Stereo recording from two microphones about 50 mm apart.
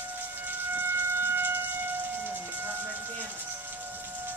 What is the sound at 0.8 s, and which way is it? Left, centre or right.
Siren, right.